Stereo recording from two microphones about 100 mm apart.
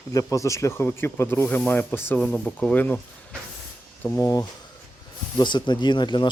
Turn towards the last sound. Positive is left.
turn(degrees=50)  # may be behind; listen again after turning